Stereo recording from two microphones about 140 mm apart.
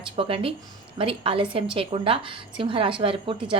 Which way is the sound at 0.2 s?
40° right (ahead or behind).